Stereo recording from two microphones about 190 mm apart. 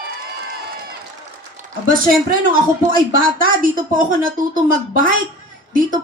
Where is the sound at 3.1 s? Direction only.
45° right (ahead or behind).